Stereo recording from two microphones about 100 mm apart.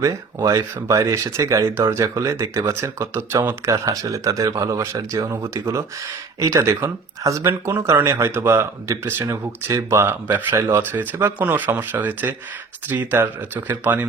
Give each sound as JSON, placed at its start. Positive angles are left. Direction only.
{"t": 0.0, "sound": "speech", "side_deg": -35}